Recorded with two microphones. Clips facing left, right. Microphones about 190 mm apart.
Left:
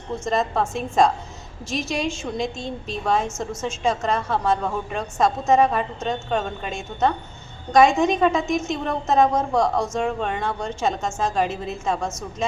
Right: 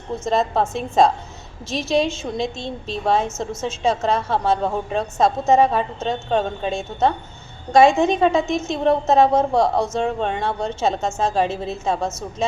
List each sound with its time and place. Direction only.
0.3 s a woman's voice: 25° right (ahead or behind)